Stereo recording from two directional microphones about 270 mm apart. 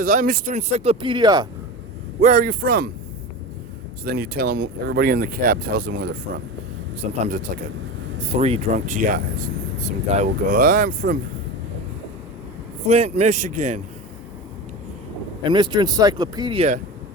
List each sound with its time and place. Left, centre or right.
0.0 s speech: right
2.2 s speech: right
4.0 s speech: right
12.9 s speech: right
15.4 s speech: centre